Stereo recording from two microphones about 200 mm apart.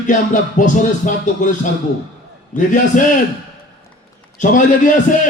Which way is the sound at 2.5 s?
40° left (ahead or behind).